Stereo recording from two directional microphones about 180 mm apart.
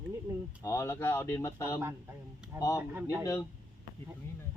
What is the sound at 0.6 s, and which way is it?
A man's voice, 15° left (ahead or behind).